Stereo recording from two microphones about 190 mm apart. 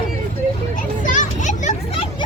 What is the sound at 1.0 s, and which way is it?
Children playing, 40° left (ahead or behind).